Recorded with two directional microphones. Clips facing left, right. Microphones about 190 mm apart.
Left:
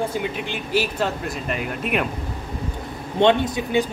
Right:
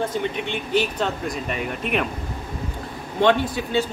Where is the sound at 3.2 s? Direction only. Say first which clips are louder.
Left 2 dB; 20° left (ahead or behind).